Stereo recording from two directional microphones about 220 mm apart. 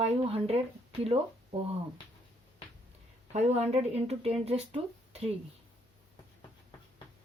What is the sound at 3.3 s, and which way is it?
Speech, 30° right (ahead or behind).